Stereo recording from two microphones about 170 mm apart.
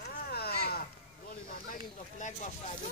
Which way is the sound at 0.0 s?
65° left (ahead or behind).